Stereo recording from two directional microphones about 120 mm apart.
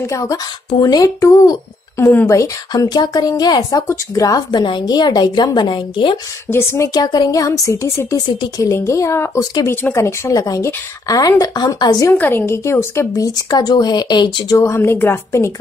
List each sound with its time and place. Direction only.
0.0 s a woman's voice: 25° left (ahead or behind)
3.8 s a woman's voice: 25° left (ahead or behind); by 6.1 s 40° left (ahead or behind)
6.5 s a woman's voice: 20° left (ahead or behind)
6.9 s a woman's voice: 35° left (ahead or behind)
12.1 s a woman's voice: 15° left (ahead or behind); by 14.6 s 40° left (ahead or behind)
14.6 s a woman's voice: 20° left (ahead or behind)